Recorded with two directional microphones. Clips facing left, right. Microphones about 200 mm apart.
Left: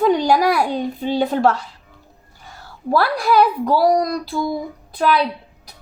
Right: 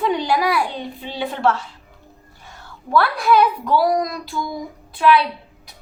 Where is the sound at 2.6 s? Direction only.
35° left (ahead or behind).